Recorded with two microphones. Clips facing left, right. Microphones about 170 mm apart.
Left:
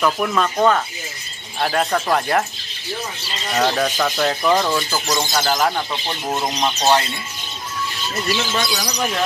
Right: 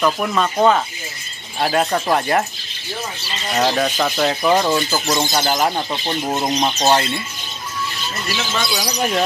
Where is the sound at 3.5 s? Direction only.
10° right (ahead or behind).